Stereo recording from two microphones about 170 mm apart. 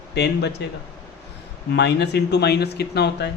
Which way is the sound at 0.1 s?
80° left.